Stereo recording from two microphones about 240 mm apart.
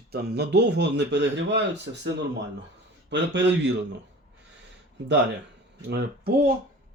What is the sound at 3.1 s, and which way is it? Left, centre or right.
Speech, right.